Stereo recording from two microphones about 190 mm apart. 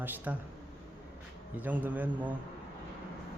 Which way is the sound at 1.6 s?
10° right (ahead or behind).